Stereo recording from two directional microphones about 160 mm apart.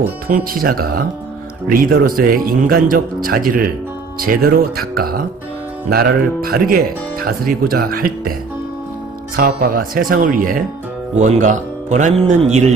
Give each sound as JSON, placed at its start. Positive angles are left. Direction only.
{"t": 0.3, "sound": "speech", "side_deg": -65}
{"t": 9.4, "sound": "speech", "side_deg": -75}